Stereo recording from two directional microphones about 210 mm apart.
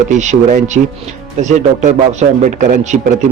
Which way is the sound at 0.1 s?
35° right (ahead or behind).